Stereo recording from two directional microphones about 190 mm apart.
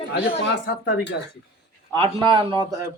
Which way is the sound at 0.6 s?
65° left (ahead or behind).